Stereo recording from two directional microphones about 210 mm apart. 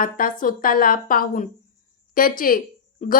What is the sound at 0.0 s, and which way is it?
A woman's voice, 40° left (ahead or behind).